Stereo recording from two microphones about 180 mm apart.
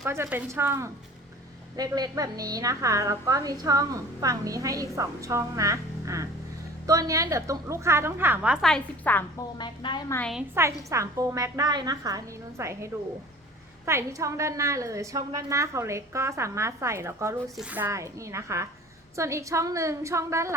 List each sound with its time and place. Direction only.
0.0 s a woman's voice: 15° right (ahead or behind)
8.6 s a woman's voice: 5° left (ahead or behind)
9.6 s a woman's voice: 25° left (ahead or behind)
10.2 s a woman's voice: 5° left (ahead or behind)
10.5 s a woman's voice: 15° right (ahead or behind)